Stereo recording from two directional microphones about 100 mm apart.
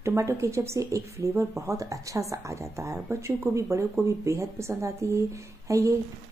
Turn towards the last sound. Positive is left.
turn(degrees=-35)  # may be behind; listen again after turning